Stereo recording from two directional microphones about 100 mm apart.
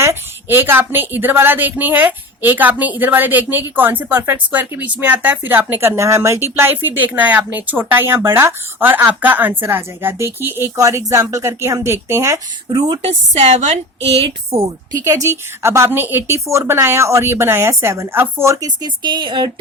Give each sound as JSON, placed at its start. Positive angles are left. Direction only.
{"t": 0.0, "sound": "speech", "side_deg": -25}
{"t": 10.8, "sound": "speech", "side_deg": -35}
{"t": 13.0, "sound": "speech", "side_deg": -90}
{"t": 14.9, "sound": "speech", "side_deg": -30}